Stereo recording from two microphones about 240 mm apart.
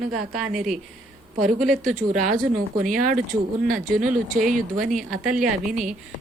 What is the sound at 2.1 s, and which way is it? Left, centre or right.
Speech, right.